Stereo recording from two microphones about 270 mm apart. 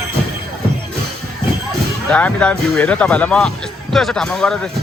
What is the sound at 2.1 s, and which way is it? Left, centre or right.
Speech, centre.